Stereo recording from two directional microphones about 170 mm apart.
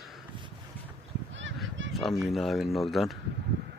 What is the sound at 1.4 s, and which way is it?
Honk, 90° right.